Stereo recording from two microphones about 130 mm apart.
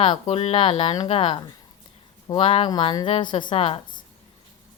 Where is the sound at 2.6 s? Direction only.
35° left (ahead or behind).